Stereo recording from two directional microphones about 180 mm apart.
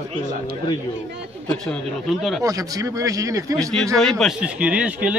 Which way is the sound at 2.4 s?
20° right (ahead or behind).